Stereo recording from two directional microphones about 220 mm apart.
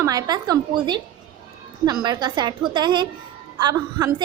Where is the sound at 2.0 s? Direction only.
20° right (ahead or behind).